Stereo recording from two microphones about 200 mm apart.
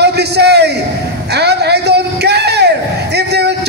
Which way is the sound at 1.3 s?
55° right (ahead or behind).